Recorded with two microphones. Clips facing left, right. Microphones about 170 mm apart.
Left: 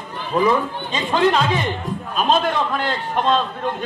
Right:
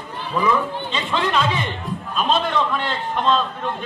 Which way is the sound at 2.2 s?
40° left (ahead or behind).